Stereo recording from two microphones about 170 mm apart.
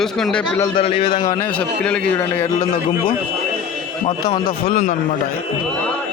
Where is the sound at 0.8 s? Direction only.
35° left (ahead or behind).